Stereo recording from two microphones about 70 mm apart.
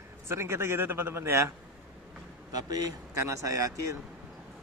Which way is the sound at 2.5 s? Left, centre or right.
Right.